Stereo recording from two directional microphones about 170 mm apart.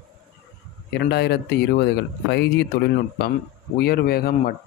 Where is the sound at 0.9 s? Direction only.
70° left (ahead or behind).